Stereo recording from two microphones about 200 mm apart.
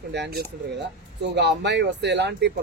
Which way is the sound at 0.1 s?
55° right (ahead or behind).